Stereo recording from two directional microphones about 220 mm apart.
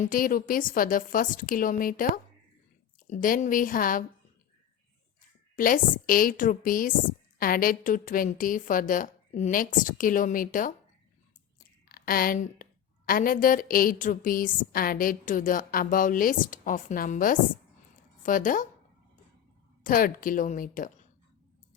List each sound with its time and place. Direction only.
0.0 s a woman's voice: 40° left (ahead or behind)
3.1 s a woman's voice: 40° left (ahead or behind)
5.5 s a woman's voice: 40° left (ahead or behind)
11.9 s a sound: 40° left (ahead or behind)
13.1 s a woman's voice: 40° left (ahead or behind)
19.8 s a woman's voice: 40° left (ahead or behind)